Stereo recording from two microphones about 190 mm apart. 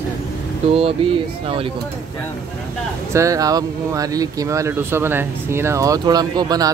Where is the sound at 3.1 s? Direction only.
15° right (ahead or behind).